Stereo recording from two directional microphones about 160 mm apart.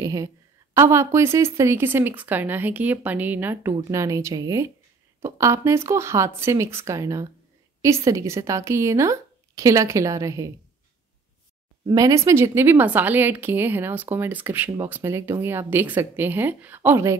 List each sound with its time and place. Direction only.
0.0 s a woman's voice: 20° right (ahead or behind)
11.8 s speech: 25° right (ahead or behind)